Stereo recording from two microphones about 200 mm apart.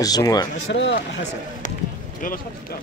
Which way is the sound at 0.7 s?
60° left (ahead or behind).